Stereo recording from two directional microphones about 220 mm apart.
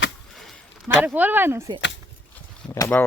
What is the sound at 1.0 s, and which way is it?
Speech, 10° right (ahead or behind).